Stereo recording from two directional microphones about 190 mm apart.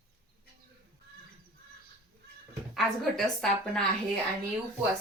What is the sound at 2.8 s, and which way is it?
A woman's voice, centre (ahead or behind).